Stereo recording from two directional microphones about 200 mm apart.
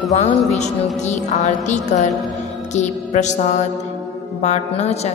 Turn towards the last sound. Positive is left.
turn(degrees=35)  # may be behind; listen again after turning